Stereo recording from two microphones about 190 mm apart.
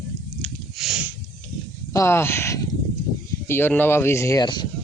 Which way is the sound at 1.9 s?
15° left (ahead or behind).